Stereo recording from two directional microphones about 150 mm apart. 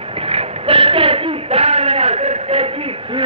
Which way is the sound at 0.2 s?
40° right (ahead or behind).